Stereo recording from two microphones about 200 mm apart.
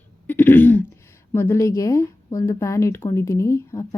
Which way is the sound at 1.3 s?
10° left (ahead or behind).